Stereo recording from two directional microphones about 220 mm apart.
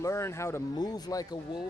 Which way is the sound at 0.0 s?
10° left (ahead or behind).